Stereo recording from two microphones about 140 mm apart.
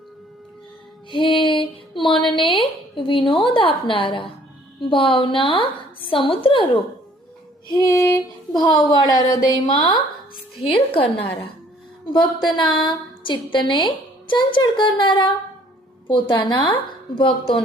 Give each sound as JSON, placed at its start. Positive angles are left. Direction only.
{"t": 1.1, "sound": "music", "side_deg": 40}
{"t": 2.2, "sound": "a woman's voice", "side_deg": 35}
{"t": 7.7, "sound": "a sound", "side_deg": 20}
{"t": 10.6, "sound": "a woman's voice", "side_deg": 40}
{"t": 12.5, "sound": "a woman's voice", "side_deg": 35}
{"t": 16.3, "sound": "a woman's voice", "side_deg": 35}